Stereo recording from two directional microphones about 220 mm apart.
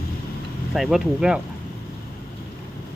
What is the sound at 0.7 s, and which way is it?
Speech, 5° right (ahead or behind).